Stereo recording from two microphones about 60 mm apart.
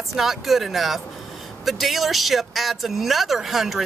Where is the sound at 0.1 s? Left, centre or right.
Centre.